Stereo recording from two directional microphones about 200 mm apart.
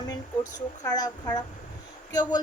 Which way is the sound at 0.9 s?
20° left (ahead or behind).